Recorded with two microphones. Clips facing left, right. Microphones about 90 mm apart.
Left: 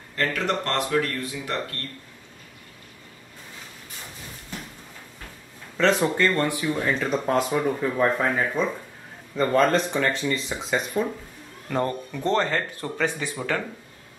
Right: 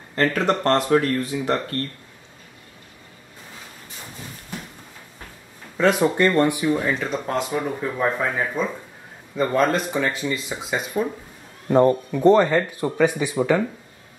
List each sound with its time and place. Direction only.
0.1 s speech: 35° right (ahead or behind)
5.8 s speech: 10° right (ahead or behind)
11.7 s speech: 25° right (ahead or behind)
12.1 s speech: 15° right (ahead or behind)